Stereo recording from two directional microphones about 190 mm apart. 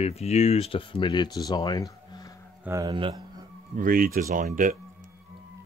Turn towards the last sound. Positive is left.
turn(degrees=-45)  # may be behind; listen again after turning